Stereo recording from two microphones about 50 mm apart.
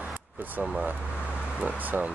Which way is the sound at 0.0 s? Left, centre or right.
Right.